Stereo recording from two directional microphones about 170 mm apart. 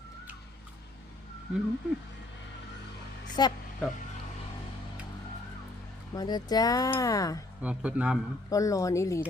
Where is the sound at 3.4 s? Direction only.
25° left (ahead or behind).